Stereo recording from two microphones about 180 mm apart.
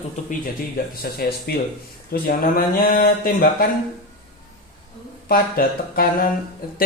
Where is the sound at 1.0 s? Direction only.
60° left (ahead or behind).